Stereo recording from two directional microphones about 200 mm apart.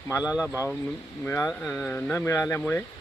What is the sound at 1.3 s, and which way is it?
Speech, 15° left (ahead or behind).